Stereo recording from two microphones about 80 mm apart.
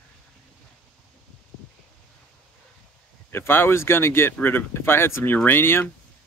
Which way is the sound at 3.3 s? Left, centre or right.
Left.